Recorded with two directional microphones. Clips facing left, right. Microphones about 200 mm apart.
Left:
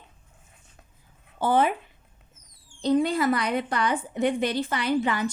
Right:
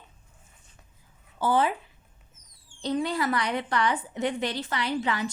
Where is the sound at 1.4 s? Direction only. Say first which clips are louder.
Left 2 dB; 20° left (ahead or behind).